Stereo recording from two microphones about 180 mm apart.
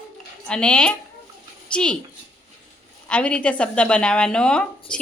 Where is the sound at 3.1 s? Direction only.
5° left (ahead or behind).